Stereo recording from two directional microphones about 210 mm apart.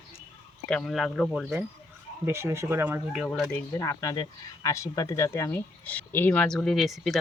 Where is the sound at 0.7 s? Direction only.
5° left (ahead or behind).